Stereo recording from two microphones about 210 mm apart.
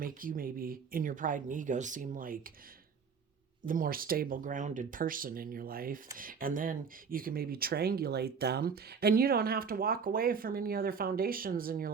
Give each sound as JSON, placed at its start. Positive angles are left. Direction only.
{"t": 0.0, "sound": "speech", "side_deg": -40}
{"t": 3.7, "sound": "speech", "side_deg": -40}